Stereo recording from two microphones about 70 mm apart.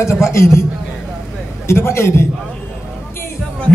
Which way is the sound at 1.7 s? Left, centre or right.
Left.